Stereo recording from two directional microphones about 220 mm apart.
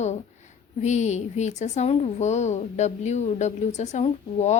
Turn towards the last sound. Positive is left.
turn(degrees=30)  # may be behind; listen again after turning